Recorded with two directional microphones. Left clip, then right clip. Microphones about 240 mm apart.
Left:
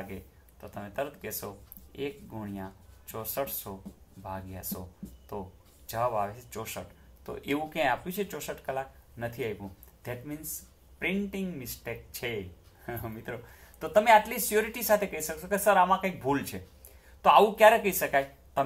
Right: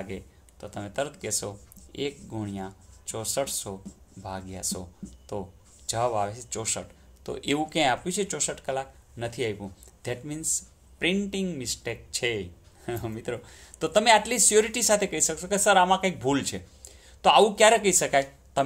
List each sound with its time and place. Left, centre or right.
0.1 s speech: right
11.6 s speech: right
16.3 s speech: right